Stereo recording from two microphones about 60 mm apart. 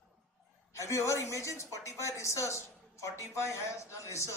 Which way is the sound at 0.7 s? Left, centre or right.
Left.